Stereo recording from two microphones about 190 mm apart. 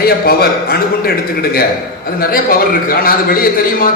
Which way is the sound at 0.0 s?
50° left (ahead or behind).